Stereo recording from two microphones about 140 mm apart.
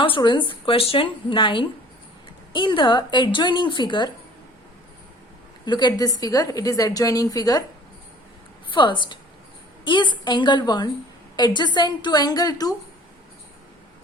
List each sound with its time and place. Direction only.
0.0 s a woman's voice: 35° left (ahead or behind)
5.6 s a woman's voice: 30° left (ahead or behind)
8.7 s a woman's voice: 35° left (ahead or behind)